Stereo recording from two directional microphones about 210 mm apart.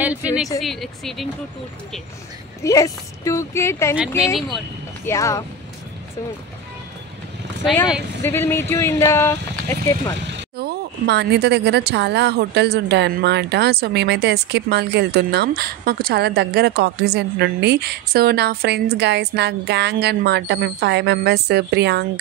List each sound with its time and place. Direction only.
0.0 s speech: 5° right (ahead or behind)
2.6 s speech: 15° left (ahead or behind)
4.2 s speech: centre (ahead or behind)
5.0 s speech: 15° left (ahead or behind)
8.2 s speech: 10° left (ahead or behind)
10.3 s speech: 50° right (ahead or behind)